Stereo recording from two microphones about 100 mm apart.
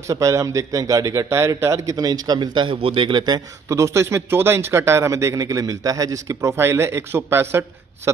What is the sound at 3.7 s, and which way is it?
Speech, 30° right (ahead or behind).